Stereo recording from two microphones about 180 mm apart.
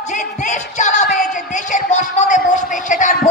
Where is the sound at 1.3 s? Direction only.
45° left (ahead or behind).